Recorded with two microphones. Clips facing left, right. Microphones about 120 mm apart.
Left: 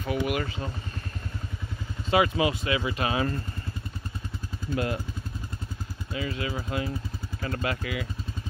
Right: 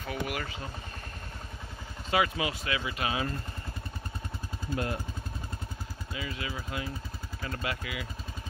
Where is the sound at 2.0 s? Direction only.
25° left (ahead or behind).